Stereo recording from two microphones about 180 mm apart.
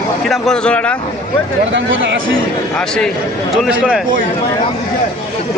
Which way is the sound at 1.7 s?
90° right.